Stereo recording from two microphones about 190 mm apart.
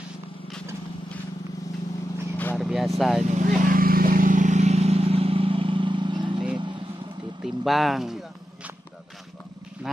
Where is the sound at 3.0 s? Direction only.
Centre (ahead or behind).